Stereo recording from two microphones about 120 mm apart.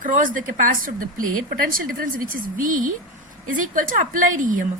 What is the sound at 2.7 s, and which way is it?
A woman's voice, 90° right.